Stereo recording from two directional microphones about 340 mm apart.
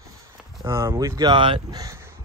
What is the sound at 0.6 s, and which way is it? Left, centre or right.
Speech, centre.